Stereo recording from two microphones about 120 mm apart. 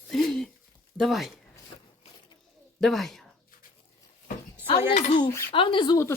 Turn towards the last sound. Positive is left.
turn(degrees=35)  # may be behind; listen again after turning